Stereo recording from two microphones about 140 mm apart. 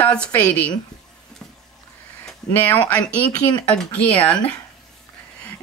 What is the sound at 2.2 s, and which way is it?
A woman's voice, 10° left (ahead or behind).